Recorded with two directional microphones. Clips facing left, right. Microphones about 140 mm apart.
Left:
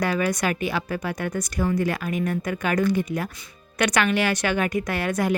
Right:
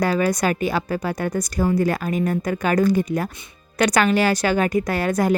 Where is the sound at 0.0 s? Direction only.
35° right (ahead or behind).